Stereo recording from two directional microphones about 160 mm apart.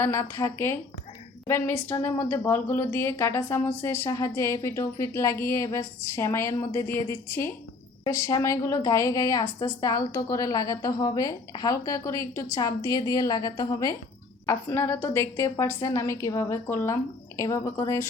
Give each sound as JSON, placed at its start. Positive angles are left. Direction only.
{"t": 0.0, "sound": "a woman's voice", "side_deg": 15}